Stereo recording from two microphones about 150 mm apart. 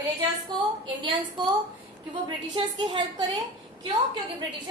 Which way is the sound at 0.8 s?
35° right (ahead or behind).